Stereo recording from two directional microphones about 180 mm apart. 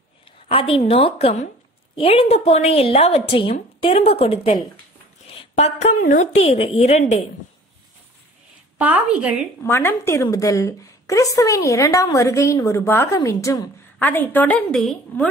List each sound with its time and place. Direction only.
0.5 s a woman's voice: 30° left (ahead or behind)
8.7 s a woman's voice: 5° right (ahead or behind)
9.6 s a woman's voice: 15° left (ahead or behind)